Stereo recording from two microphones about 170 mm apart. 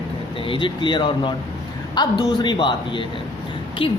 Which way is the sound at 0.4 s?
30° left (ahead or behind).